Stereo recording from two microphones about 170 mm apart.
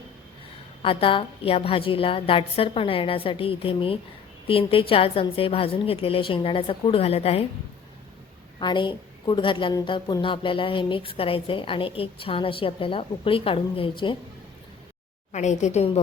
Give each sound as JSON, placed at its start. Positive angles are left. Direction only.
{"t": 0.8, "sound": "a woman's voice", "side_deg": 35}
{"t": 8.5, "sound": "a woman's voice", "side_deg": 30}
{"t": 15.3, "sound": "a woman's voice", "side_deg": 45}